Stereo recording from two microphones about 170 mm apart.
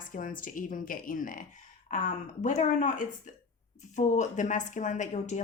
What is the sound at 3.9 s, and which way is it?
A woman's voice, 45° left (ahead or behind).